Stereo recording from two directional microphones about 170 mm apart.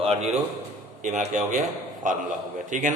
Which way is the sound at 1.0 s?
45° right (ahead or behind).